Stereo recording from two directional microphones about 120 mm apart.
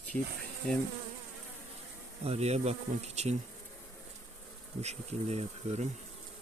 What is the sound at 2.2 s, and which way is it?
Bee, 60° right (ahead or behind).